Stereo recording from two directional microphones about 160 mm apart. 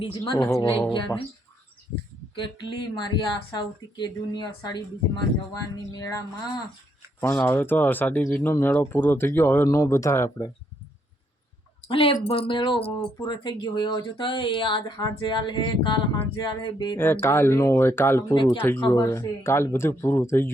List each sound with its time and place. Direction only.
0.7 s speech: 30° left (ahead or behind)
2.3 s speech: 30° left (ahead or behind)
11.9 s speech: 35° left (ahead or behind)
17.0 s speech: 15° left (ahead or behind)